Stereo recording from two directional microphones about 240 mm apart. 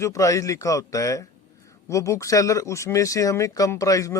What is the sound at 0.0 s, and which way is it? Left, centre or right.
Speech, centre.